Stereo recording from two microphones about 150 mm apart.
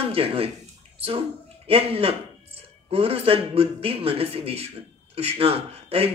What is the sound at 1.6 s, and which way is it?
Speech, 40° right (ahead or behind).